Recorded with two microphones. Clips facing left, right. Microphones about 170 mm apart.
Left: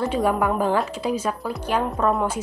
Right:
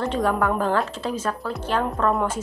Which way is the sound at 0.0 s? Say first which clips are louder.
Left 1 dB; 10° left (ahead or behind).